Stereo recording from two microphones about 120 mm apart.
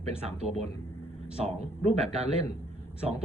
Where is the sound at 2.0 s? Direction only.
60° right (ahead or behind).